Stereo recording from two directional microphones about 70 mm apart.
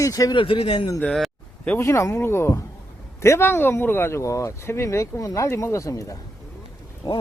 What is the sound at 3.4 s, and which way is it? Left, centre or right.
Speech, left.